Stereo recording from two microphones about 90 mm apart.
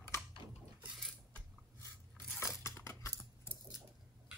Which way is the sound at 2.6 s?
30° left (ahead or behind).